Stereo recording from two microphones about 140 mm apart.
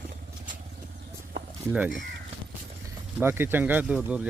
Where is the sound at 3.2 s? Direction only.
15° right (ahead or behind).